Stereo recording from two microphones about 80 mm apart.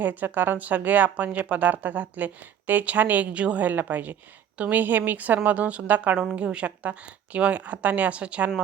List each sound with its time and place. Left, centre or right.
0.0 s a woman's voice: right